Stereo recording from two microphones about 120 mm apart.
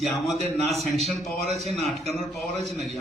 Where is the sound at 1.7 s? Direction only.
60° right (ahead or behind).